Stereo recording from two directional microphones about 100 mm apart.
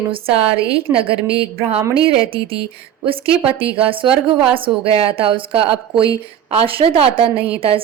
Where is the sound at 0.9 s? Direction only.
70° right (ahead or behind).